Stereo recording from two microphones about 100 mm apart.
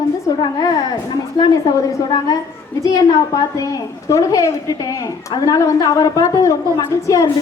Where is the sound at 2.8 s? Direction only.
35° left (ahead or behind).